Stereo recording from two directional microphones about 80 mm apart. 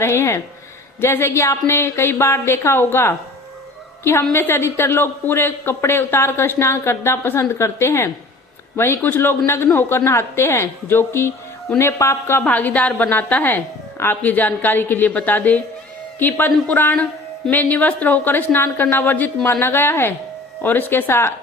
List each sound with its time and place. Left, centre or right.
0.0 s a woman's voice: left
9.0 s a woman's voice: left